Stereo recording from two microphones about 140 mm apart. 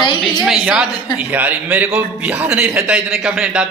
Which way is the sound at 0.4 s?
5° right (ahead or behind).